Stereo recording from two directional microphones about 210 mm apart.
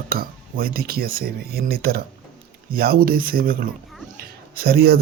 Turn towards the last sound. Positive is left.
turn(degrees=-45)  # may be behind; listen again after turning